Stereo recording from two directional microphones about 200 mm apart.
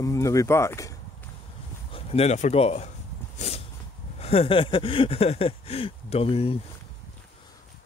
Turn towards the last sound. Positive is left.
turn(degrees=30)  # may be behind; listen again after turning